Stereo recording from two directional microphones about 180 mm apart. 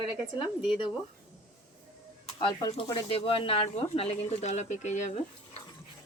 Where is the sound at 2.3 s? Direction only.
30° left (ahead or behind).